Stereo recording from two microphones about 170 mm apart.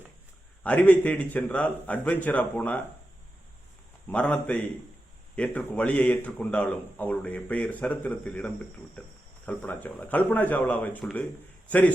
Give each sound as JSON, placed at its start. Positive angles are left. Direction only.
{"t": 0.6, "sound": "a man's voice", "side_deg": 10}
{"t": 4.1, "sound": "a man's voice", "side_deg": 5}